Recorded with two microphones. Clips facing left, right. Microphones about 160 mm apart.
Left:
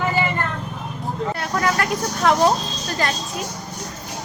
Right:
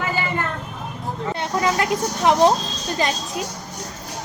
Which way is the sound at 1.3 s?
20° right (ahead or behind).